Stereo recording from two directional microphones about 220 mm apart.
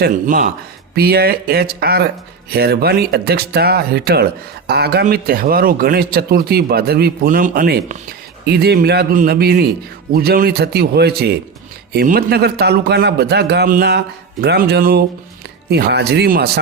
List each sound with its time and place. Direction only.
0.0 s a man's voice: 40° right (ahead or behind)